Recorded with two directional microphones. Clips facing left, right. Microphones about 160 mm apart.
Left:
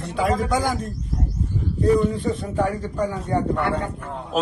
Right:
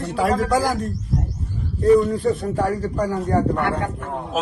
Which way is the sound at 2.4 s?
40° right (ahead or behind).